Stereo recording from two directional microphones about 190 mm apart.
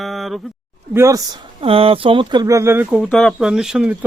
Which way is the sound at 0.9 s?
15° right (ahead or behind).